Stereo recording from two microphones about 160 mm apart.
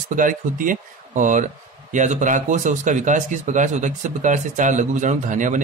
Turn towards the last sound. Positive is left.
turn(degrees=-55)  # may be behind; listen again after turning